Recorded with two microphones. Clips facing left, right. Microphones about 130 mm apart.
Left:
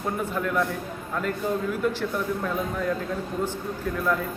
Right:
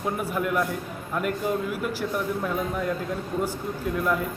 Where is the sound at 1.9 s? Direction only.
10° right (ahead or behind).